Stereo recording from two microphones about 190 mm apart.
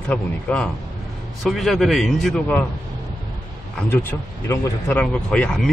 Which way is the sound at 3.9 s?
10° left (ahead or behind).